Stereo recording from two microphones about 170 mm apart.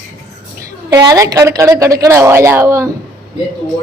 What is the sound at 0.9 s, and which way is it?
A woman's voice, 20° right (ahead or behind).